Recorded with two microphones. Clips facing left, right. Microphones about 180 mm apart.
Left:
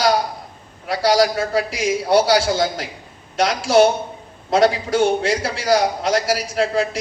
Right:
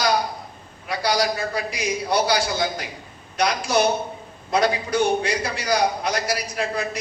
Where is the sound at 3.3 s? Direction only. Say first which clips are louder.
Left 6 dB; 90° left.